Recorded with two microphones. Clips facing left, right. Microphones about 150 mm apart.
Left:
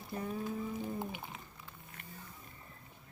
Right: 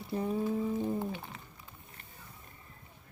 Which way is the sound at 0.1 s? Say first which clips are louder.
Right 6 dB; 30° right (ahead or behind).